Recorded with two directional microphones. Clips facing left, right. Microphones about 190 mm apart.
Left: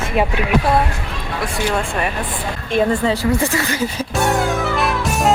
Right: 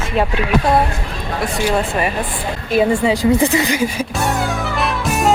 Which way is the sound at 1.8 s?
5° right (ahead or behind).